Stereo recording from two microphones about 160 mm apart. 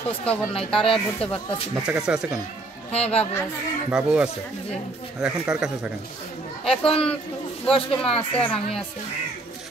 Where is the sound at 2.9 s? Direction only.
40° left (ahead or behind).